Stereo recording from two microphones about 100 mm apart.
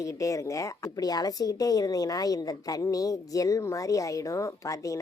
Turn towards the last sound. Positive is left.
turn(degrees=35)  # may be behind; listen again after turning